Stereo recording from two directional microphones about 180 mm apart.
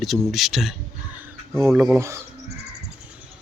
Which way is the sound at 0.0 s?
Centre (ahead or behind).